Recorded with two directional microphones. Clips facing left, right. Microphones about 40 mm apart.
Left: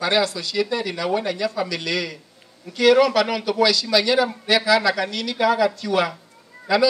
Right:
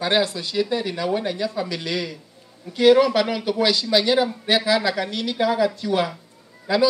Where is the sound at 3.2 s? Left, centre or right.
Left.